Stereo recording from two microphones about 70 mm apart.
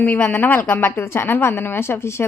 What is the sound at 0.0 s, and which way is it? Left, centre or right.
A woman's voice, left.